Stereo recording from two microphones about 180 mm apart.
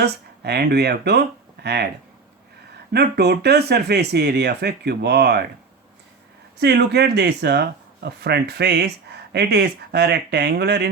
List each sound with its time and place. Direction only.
0.0 s speech: 65° right (ahead or behind)
2.9 s speech: 65° right (ahead or behind)
6.6 s speech: 65° right (ahead or behind)